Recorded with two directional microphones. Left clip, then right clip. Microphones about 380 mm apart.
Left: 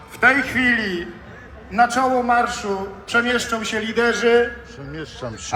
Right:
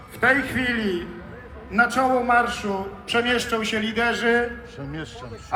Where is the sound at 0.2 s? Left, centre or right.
Left.